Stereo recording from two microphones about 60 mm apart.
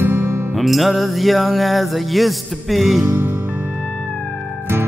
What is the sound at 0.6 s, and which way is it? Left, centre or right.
Music, centre.